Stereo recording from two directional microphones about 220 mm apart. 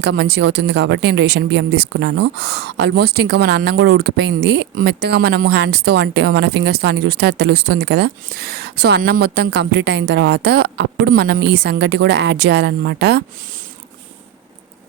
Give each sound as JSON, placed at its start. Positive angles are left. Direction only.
{"t": 0.0, "sound": "speech", "side_deg": -50}